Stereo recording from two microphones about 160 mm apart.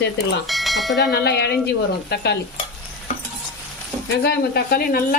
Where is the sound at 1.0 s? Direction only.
90° left.